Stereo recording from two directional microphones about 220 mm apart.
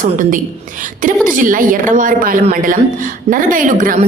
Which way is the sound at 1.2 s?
40° right (ahead or behind).